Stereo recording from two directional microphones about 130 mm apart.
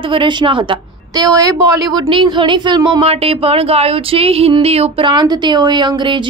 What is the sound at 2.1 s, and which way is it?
Speech, 40° right (ahead or behind).